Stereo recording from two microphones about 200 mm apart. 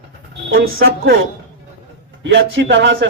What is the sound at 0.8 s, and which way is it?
Speech, 50° right (ahead or behind).